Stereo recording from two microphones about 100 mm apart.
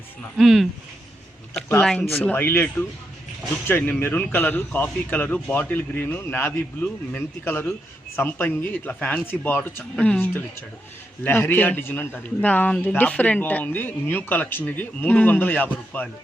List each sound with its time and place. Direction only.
0.3 s speech: centre (ahead or behind)
1.8 s speech: 5° left (ahead or behind)
2.2 s speech: 20° left (ahead or behind)